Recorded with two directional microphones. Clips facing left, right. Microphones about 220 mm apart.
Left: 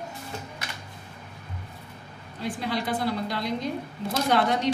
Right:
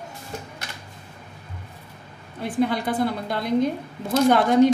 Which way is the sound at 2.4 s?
55° right (ahead or behind).